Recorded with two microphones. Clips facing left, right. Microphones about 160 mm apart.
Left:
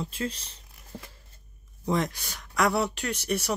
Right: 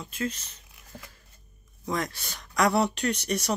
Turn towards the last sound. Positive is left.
turn(degrees=5)  # may be behind; listen again after turning